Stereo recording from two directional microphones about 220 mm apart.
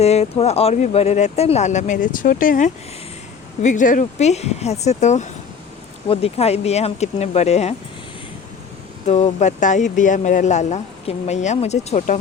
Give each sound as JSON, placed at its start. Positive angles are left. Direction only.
{"t": 0.0, "sound": "speech", "side_deg": 30}
{"t": 9.0, "sound": "speech", "side_deg": 30}